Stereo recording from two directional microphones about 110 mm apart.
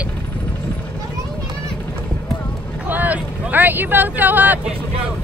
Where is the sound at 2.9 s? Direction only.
15° right (ahead or behind).